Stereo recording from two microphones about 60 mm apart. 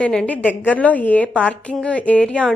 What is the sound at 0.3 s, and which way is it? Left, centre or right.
A woman's voice, left.